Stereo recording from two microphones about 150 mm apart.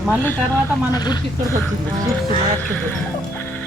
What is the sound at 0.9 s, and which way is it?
Speech, 30° left (ahead or behind).